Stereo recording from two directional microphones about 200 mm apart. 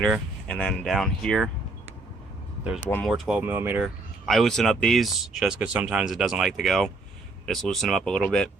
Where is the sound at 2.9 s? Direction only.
5° left (ahead or behind).